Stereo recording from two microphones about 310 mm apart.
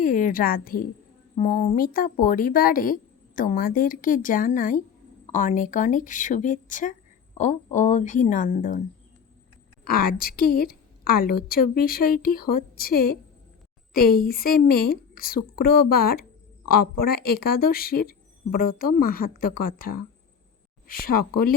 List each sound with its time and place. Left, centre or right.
0.0 s speech: left
9.8 s a woman's voice: left
14.2 s a woman's voice: left
21.0 s speech: left